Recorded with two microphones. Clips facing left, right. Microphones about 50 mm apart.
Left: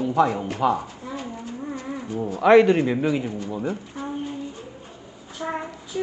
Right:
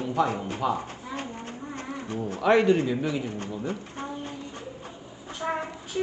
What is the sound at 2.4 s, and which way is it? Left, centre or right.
Speech, left.